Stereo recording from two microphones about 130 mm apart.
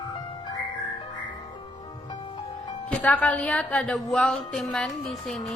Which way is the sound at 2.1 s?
35° left (ahead or behind).